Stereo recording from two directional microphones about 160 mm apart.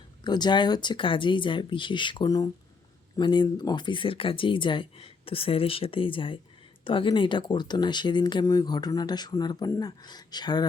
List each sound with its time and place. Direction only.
0.3 s speech: 25° left (ahead or behind)